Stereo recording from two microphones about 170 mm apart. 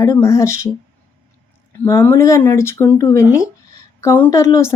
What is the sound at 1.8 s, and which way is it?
A woman's voice, 15° left (ahead or behind).